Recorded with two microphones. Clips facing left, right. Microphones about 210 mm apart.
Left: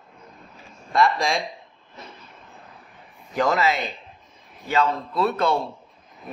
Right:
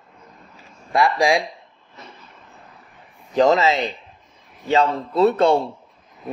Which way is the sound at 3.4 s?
20° right (ahead or behind).